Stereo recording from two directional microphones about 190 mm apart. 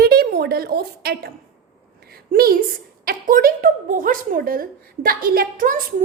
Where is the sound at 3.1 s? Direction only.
50° right (ahead or behind).